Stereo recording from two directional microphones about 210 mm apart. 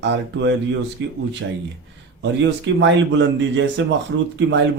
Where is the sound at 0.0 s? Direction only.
60° right (ahead or behind).